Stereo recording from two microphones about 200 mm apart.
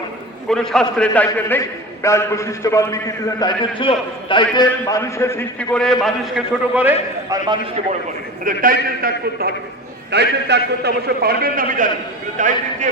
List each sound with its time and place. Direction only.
0.5 s a man's voice: centre (ahead or behind)
8.4 s a man's voice: 45° right (ahead or behind)
10.1 s a man's voice: 55° right (ahead or behind); by 12.9 s 40° right (ahead or behind)